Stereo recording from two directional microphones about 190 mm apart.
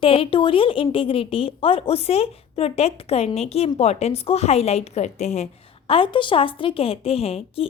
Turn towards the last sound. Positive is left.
turn(degrees=30)  # may be behind; listen again after turning